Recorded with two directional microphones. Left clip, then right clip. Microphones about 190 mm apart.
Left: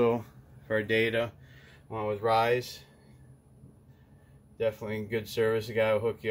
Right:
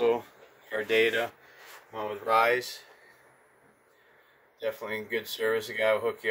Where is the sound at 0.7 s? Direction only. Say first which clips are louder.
Right 2 dB; 10° right (ahead or behind).